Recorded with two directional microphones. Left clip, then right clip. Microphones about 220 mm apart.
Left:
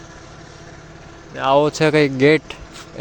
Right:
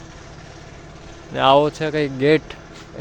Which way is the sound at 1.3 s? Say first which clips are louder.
Right 5 dB; 25° right (ahead or behind).